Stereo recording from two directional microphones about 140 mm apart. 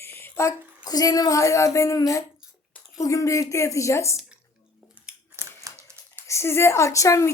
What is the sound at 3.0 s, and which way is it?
Speech, 20° left (ahead or behind).